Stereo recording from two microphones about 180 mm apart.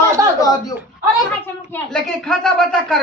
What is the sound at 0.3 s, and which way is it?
Chuckle, 20° left (ahead or behind).